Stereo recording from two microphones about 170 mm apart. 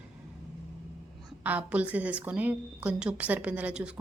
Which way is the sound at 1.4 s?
10° right (ahead or behind).